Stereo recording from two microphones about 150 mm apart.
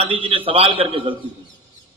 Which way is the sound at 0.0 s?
40° right (ahead or behind).